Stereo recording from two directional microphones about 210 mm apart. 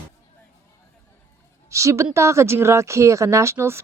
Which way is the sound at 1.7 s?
15° right (ahead or behind).